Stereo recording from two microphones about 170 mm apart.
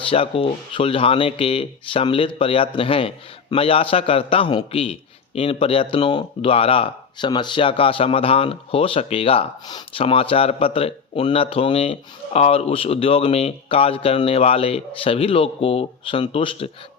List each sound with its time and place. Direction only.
0.1 s a man's voice: 30° left (ahead or behind)